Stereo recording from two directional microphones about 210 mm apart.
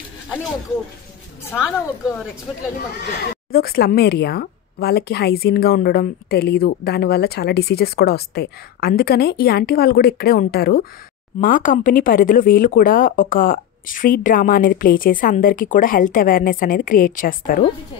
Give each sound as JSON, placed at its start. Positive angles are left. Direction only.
{"t": 1.5, "sound": "speech", "side_deg": 10}
{"t": 3.0, "sound": "a woman's voice", "side_deg": 50}